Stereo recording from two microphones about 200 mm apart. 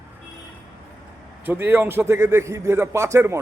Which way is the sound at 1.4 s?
10° right (ahead or behind).